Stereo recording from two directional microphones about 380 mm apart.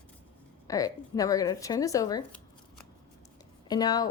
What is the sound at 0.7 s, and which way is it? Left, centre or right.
A woman's voice, centre.